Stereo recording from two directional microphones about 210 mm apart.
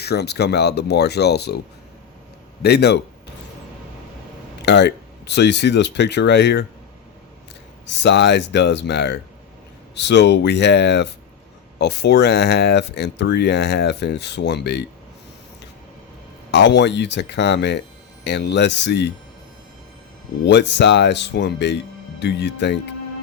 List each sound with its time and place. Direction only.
0.0 s speech: 50° left (ahead or behind)
2.6 s speech: 50° left (ahead or behind)
4.6 s speech: 55° left (ahead or behind)
8.0 s speech: 55° left (ahead or behind)
16.5 s speech: 55° left (ahead or behind)
20.4 s speech: 55° left (ahead or behind)